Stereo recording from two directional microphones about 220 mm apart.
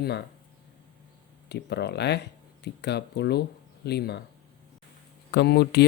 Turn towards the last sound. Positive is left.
turn(degrees=50)  # may be behind; listen again after turning